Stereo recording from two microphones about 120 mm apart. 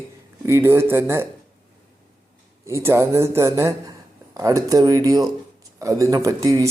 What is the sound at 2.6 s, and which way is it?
Speech, 25° right (ahead or behind).